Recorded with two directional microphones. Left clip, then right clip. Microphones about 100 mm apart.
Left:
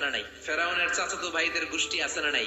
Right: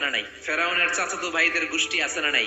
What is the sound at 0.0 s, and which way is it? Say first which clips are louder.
A man's voice: right 4 dB; 20° right (ahead or behind).